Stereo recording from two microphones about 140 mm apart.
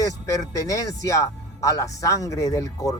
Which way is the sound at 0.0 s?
25° left (ahead or behind).